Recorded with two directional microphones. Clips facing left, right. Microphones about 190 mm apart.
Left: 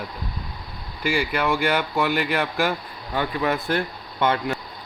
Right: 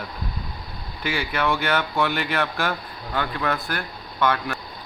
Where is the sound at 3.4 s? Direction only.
20° left (ahead or behind).